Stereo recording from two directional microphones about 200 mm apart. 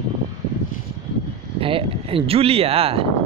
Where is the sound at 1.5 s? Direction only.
25° right (ahead or behind).